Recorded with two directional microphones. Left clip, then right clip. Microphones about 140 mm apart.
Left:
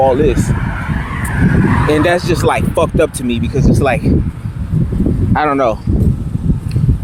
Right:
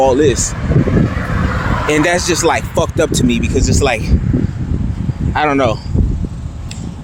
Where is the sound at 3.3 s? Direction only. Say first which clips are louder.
Even; 15° right (ahead or behind).